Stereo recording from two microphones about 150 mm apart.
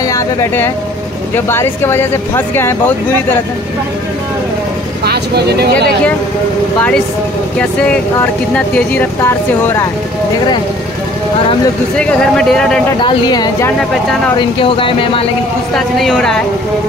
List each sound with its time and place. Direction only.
0.1 s speech: 15° left (ahead or behind)
5.0 s speech: 90° right
7.8 s speech: 5° left (ahead or behind)
12.0 s speech: 5° left (ahead or behind)
13.0 s speech: 25° left (ahead or behind)
15.7 s speech: centre (ahead or behind)